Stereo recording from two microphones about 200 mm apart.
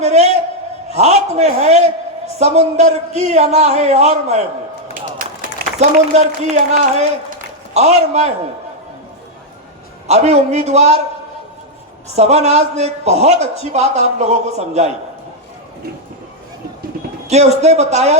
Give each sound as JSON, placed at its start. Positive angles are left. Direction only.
{"t": 0.0, "sound": "a man's voice", "side_deg": -35}
{"t": 4.9, "sound": "a sound", "side_deg": -45}
{"t": 6.1, "sound": "a man's voice", "side_deg": -35}
{"t": 10.1, "sound": "a man's voice", "side_deg": -35}
{"t": 12.1, "sound": "a man's voice", "side_deg": -30}
{"t": 17.2, "sound": "a man's voice", "side_deg": -35}